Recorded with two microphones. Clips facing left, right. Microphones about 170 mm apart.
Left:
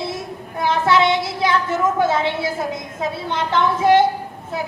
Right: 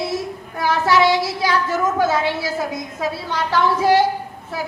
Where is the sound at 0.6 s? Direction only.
25° left (ahead or behind).